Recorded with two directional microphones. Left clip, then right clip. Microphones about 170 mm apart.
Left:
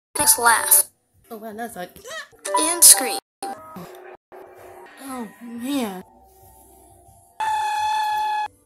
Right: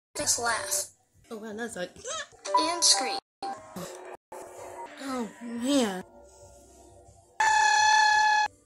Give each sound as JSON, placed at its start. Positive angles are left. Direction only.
{"t": 0.1, "sound": "speech", "side_deg": 25}
{"t": 1.3, "sound": "a child's voice", "side_deg": 10}
{"t": 2.4, "sound": "music", "side_deg": 30}
{"t": 5.0, "sound": "a child's voice", "side_deg": 5}
{"t": 7.3, "sound": "a sound", "side_deg": -40}